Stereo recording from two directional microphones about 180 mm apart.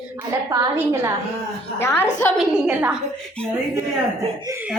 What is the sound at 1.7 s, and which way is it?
Speech, 15° left (ahead or behind).